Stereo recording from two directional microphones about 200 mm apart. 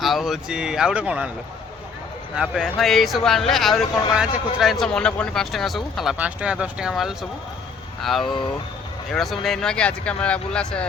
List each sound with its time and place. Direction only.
0.0 s speech: centre (ahead or behind)
2.3 s speech: centre (ahead or behind)
8.2 s speech: 25° left (ahead or behind)
9.1 s speech: centre (ahead or behind)